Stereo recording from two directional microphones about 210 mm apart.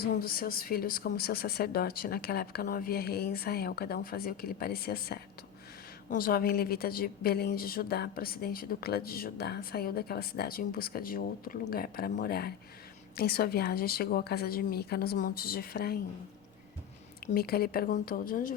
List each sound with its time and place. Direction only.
0.1 s a woman's voice: 45° left (ahead or behind)
17.3 s a woman's voice: 45° left (ahead or behind)